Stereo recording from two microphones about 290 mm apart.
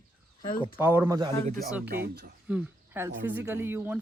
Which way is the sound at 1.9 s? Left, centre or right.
Right.